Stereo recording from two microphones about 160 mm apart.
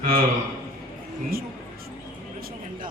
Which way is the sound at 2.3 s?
70° right (ahead or behind).